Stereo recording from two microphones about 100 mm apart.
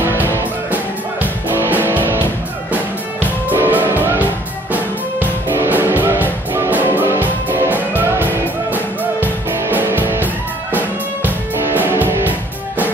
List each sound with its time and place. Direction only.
0.0 s music: 25° right (ahead or behind)